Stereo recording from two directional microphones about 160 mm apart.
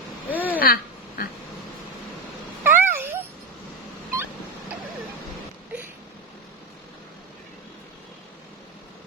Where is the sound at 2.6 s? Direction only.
15° right (ahead or behind).